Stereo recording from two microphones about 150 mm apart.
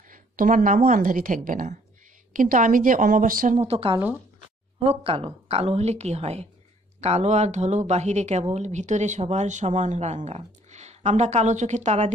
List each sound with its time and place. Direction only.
0.1 s speech: 65° right (ahead or behind)
3.6 s speech: 40° right (ahead or behind)